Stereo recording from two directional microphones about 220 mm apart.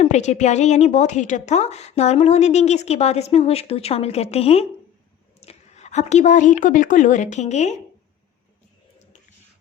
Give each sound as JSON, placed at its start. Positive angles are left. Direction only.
{"t": 0.0, "sound": "a woman's voice", "side_deg": 30}